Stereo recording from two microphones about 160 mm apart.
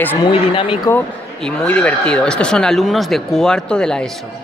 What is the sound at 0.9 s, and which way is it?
Speech, 10° left (ahead or behind).